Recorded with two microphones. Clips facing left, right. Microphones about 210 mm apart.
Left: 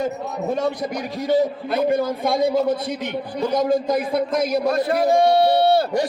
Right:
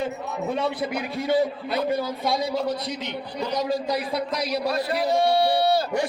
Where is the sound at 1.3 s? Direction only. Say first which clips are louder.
Left 4 dB; 45° left (ahead or behind).